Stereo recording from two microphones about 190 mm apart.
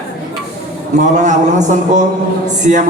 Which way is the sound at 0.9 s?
40° right (ahead or behind).